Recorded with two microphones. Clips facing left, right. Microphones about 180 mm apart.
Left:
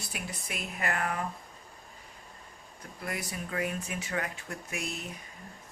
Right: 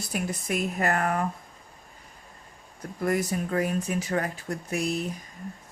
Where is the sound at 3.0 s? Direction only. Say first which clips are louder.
Right 11 dB; 45° right (ahead or behind).